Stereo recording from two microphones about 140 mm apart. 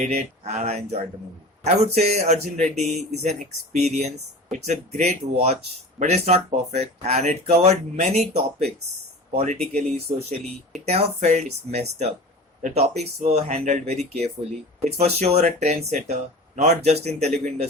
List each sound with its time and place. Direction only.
0.0 s speech: 50° right (ahead or behind)